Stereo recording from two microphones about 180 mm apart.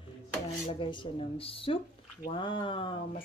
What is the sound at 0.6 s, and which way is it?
Speech, 30° left (ahead or behind).